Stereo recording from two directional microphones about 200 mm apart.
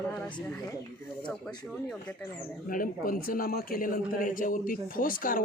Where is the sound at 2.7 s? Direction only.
45° left (ahead or behind).